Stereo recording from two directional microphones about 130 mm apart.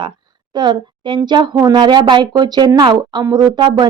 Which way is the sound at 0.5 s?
35° right (ahead or behind).